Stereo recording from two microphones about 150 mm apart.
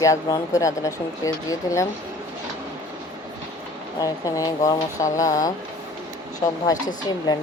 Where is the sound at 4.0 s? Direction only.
25° left (ahead or behind).